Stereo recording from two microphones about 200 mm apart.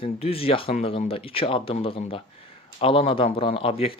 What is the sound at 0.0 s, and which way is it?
Speech, 30° left (ahead or behind).